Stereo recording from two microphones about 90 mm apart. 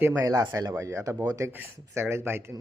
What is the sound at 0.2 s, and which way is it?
A man's voice, 40° right (ahead or behind).